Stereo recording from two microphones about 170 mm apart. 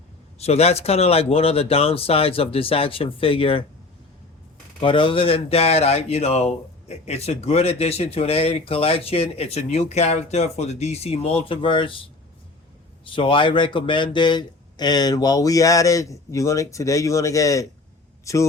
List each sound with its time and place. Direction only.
0.3 s speech: 40° left (ahead or behind)
4.8 s speech: 30° left (ahead or behind)
13.1 s speech: 30° left (ahead or behind)